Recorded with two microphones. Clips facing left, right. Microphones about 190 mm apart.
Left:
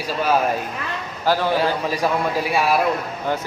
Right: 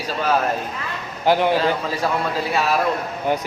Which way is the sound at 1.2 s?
20° right (ahead or behind).